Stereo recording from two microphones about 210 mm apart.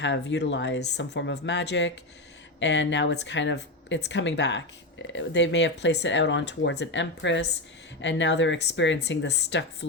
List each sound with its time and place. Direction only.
0.0 s speech: 60° left (ahead or behind)